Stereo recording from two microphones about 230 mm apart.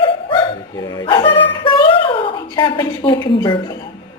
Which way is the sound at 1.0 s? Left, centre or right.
Left.